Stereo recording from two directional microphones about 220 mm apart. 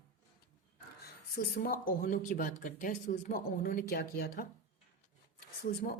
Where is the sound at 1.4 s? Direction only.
45° left (ahead or behind).